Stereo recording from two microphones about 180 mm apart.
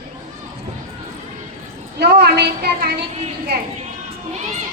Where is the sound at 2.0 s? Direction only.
65° right (ahead or behind).